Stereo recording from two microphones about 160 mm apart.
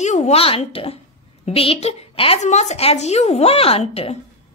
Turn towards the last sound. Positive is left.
turn(degrees=40)  # may be behind; listen again after turning